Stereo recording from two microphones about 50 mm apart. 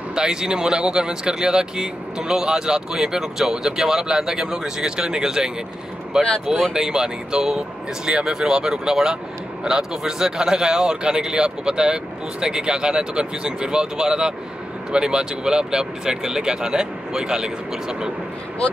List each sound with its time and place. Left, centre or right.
0.1 s speech: centre